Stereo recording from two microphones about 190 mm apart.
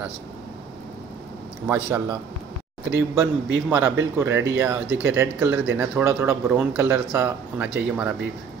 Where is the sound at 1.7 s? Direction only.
15° right (ahead or behind).